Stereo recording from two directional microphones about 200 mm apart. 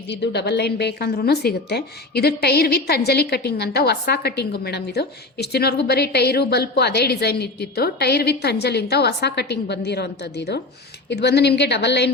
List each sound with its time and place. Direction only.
0.1 s a woman's voice: 60° left (ahead or behind)